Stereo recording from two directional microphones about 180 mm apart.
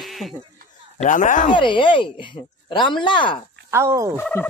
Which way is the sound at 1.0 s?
45° left (ahead or behind).